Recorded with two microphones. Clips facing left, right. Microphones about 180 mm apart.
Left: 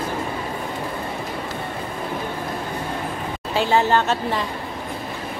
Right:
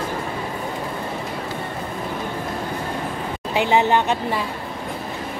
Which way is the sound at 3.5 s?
15° right (ahead or behind).